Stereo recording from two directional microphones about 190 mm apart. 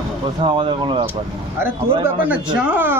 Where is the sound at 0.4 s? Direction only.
25° right (ahead or behind).